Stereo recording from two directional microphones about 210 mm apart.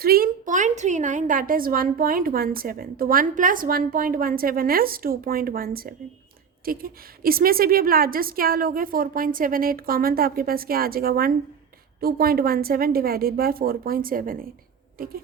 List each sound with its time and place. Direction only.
0.0 s a woman's voice: 45° right (ahead or behind)